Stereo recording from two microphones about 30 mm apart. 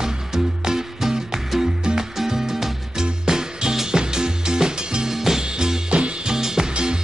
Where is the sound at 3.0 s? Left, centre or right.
Right.